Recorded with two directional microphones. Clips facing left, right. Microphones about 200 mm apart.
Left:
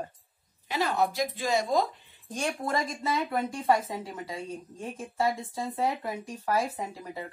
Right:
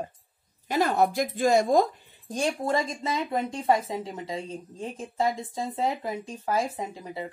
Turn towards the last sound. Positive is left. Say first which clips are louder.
# right 2 dB
turn(degrees=-20)  # may be behind; listen again after turning